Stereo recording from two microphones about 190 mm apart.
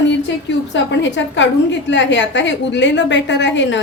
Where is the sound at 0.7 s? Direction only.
70° left (ahead or behind).